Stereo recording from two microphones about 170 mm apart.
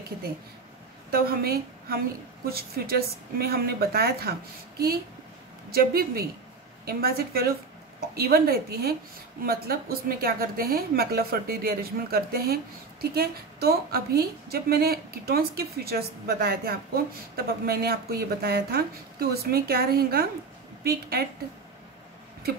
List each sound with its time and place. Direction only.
1.1 s a woman's voice: 65° right (ahead or behind)